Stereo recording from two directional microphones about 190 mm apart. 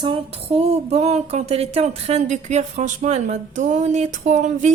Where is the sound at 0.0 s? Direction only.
30° right (ahead or behind).